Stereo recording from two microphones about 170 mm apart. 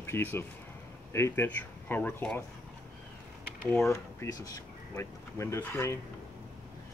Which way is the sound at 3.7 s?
15° left (ahead or behind).